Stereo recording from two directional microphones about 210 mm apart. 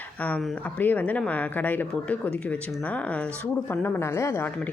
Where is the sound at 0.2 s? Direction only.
5° left (ahead or behind).